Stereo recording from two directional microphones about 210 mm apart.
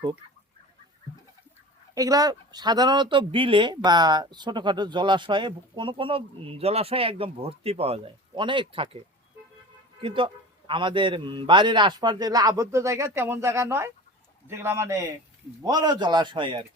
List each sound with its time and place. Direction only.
2.0 s speech: 15° right (ahead or behind)
10.0 s a man's voice: 25° right (ahead or behind)